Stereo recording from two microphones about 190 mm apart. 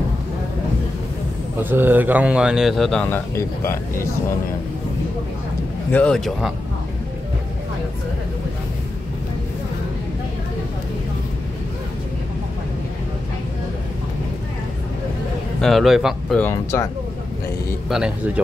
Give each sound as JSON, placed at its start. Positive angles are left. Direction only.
{"t": 1.6, "sound": "speech", "side_deg": -10}
{"t": 5.9, "sound": "speech", "side_deg": 5}
{"t": 15.6, "sound": "speech", "side_deg": 0}
{"t": 16.4, "sound": "speech", "side_deg": 15}
{"t": 17.8, "sound": "speech", "side_deg": -5}